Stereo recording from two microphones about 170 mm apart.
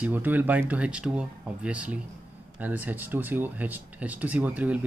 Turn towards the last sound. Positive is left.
turn(degrees=-10)  # may be behind; listen again after turning